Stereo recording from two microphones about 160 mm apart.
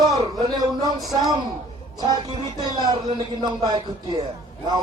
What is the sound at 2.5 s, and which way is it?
Speech, 25° right (ahead or behind).